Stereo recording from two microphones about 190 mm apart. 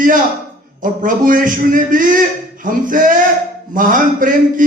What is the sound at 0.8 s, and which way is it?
A man's voice, 45° right (ahead or behind).